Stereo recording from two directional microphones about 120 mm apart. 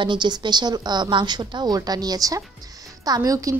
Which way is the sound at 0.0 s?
40° right (ahead or behind).